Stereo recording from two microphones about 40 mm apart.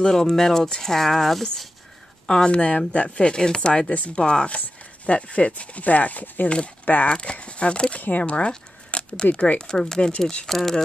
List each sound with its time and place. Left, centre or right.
0.0 s speech: centre
2.5 s speech: left
3.9 s speech: left
4.2 s speech: left
7.1 s speech: left
9.6 s speech: centre
10.5 s speech: centre